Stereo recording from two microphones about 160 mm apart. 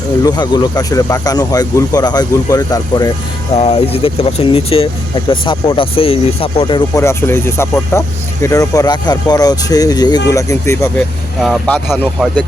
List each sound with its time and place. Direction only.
0.3 s speech: 25° left (ahead or behind)
3.5 s speech: 40° left (ahead or behind)
7.0 s speech: 15° left (ahead or behind)
11.4 s speech: 5° left (ahead or behind)